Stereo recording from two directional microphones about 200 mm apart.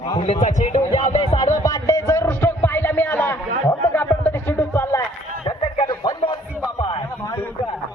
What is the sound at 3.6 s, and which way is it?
Music, 10° left (ahead or behind).